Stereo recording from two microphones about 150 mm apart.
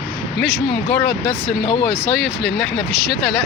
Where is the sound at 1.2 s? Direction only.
35° left (ahead or behind).